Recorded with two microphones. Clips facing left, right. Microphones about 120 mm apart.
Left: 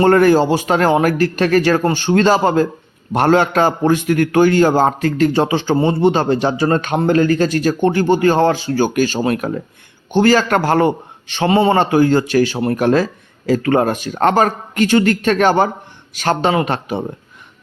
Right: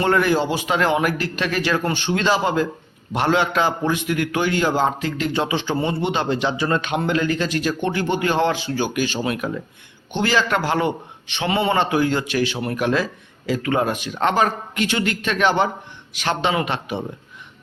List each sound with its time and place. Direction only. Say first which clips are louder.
0.0 s a man's voice: left 7 dB; 45° left (ahead or behind)